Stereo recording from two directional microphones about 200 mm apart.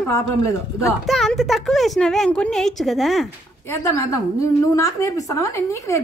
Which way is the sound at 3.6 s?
15° left (ahead or behind).